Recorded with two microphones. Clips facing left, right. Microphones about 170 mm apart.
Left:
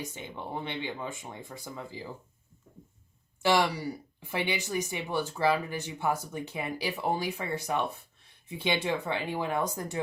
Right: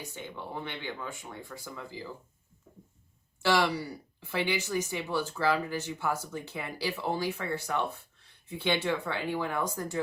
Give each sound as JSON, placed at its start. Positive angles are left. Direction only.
{"t": 0.0, "sound": "speech", "side_deg": 15}
{"t": 3.4, "sound": "speech", "side_deg": 20}